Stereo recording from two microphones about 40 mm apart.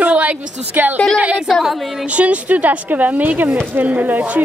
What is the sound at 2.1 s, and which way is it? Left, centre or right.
A woman's voice, right.